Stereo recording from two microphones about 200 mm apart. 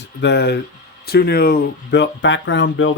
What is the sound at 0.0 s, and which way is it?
Speech, 55° left (ahead or behind).